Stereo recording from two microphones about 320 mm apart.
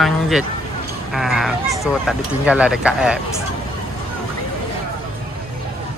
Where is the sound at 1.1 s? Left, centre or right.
Centre.